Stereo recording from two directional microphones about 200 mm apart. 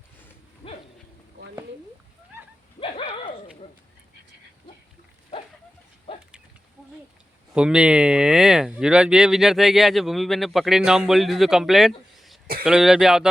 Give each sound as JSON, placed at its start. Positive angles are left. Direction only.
{"t": 2.8, "sound": "dog", "side_deg": 30}
{"t": 7.5, "sound": "speech", "side_deg": -5}